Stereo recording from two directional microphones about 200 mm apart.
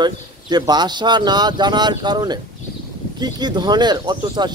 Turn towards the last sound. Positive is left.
turn(degrees=-20)  # may be behind; listen again after turning